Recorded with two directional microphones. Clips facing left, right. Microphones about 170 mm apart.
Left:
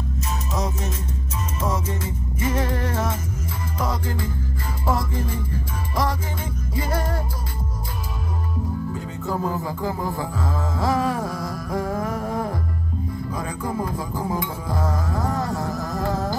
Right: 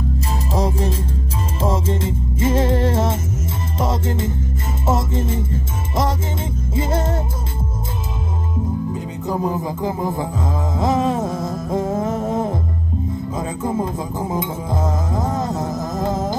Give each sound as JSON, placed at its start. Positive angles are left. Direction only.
{"t": 0.5, "sound": "music", "side_deg": -30}
{"t": 8.9, "sound": "music", "side_deg": -20}